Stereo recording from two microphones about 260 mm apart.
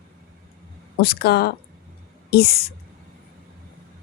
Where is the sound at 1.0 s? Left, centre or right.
Left.